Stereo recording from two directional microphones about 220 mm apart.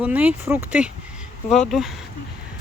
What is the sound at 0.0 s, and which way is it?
Speech, 5° right (ahead or behind).